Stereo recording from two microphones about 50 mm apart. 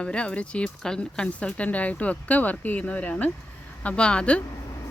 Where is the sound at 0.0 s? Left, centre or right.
Left.